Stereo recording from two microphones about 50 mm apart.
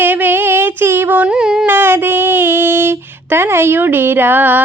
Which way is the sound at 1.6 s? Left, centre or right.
Right.